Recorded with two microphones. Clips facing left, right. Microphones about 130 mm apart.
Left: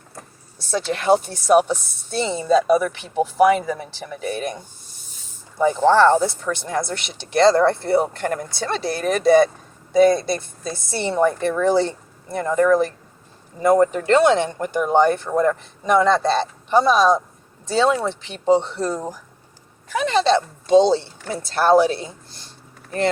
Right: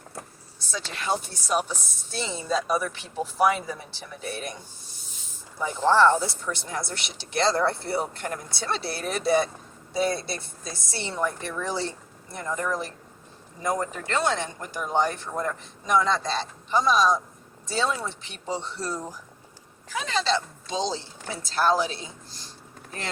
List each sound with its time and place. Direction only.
0.7 s a woman's voice: 60° left (ahead or behind)
5.5 s a woman's voice: 75° left (ahead or behind)
10.0 s a woman's voice: 50° left (ahead or behind)
17.7 s a woman's voice: 70° left (ahead or behind)